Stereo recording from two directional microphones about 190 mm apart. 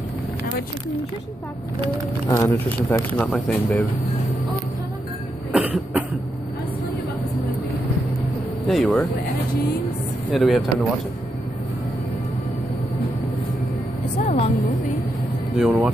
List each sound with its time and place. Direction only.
2.2 s speech: 15° left (ahead or behind)
5.5 s cough: 5° right (ahead or behind)
8.6 s speech: centre (ahead or behind)
10.3 s speech: centre (ahead or behind)
14.2 s vehicle: 35° left (ahead or behind)
15.5 s speech: 5° right (ahead or behind)